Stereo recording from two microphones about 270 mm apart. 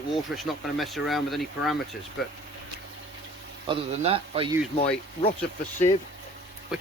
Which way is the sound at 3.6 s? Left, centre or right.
Right.